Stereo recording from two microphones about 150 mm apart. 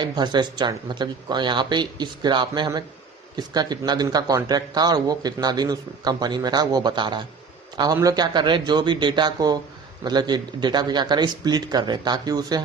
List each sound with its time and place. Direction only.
0.0 s a man's voice: 30° right (ahead or behind)